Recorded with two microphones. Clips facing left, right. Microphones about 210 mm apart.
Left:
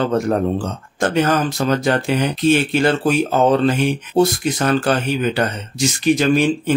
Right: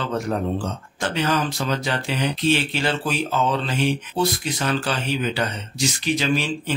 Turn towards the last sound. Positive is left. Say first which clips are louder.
# left 8 dB
turn(degrees=50)  # may be behind; listen again after turning